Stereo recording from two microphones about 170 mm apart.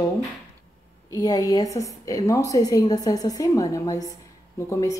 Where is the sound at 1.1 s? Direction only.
20° left (ahead or behind).